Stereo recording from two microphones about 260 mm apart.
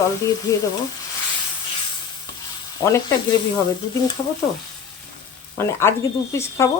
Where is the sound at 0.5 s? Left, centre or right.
Centre.